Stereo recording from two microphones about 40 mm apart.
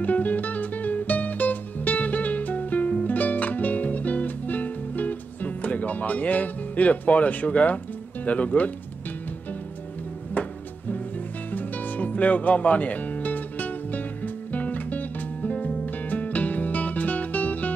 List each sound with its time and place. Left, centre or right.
0.0 s music: left
8.3 s speech: left
10.4 s music: left
11.5 s music: left
15.5 s music: left